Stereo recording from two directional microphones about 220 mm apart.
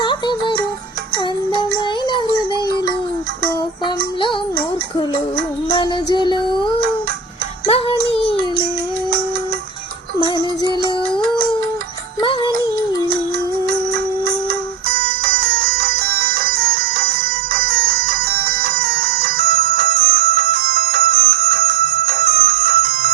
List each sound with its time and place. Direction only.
0.0 s music: 20° left (ahead or behind)
3.8 s music: 20° left (ahead or behind)
5.7 s music: 20° left (ahead or behind)
7.7 s music: 25° left (ahead or behind)
10.2 s music: 20° left (ahead or behind)
12.2 s music: 20° left (ahead or behind)
13.7 s music: 45° right (ahead or behind)